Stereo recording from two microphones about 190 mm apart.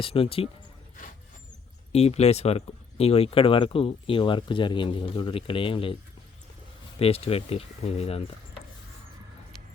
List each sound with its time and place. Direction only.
0.0 s speech: 30° left (ahead or behind)
1.9 s speech: 35° left (ahead or behind)
7.0 s speech: 30° left (ahead or behind)